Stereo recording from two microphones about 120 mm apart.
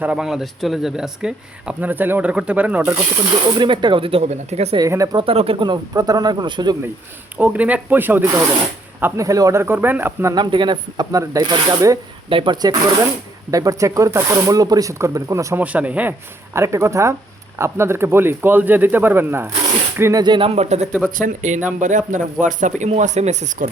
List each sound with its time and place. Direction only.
0.0 s speech: 5° right (ahead or behind)
3.2 s speech: 40° right (ahead or behind)
4.2 s speech: 65° right (ahead or behind)
4.8 s speech: 30° right (ahead or behind)
5.1 s speech: 50° right (ahead or behind); by 6.7 s 35° right (ahead or behind)
7.3 s speech: 15° right (ahead or behind)
10.3 s speech: 40° right (ahead or behind)
12.3 s speech: 45° right (ahead or behind)
13.5 s speech: 30° right (ahead or behind)
15.6 s speech: 10° right (ahead or behind)
16.6 s speech: 25° right (ahead or behind)
20.2 s speech: 40° right (ahead or behind)
20.5 s speech: 65° right (ahead or behind)
21.2 s speech: 90° right